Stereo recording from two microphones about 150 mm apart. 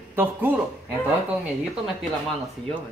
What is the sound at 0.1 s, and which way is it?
Speech, 15° right (ahead or behind).